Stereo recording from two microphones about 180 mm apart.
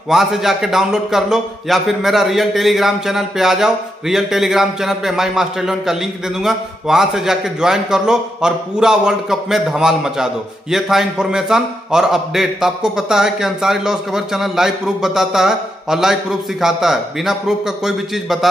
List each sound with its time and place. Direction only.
0.1 s a man's voice: centre (ahead or behind)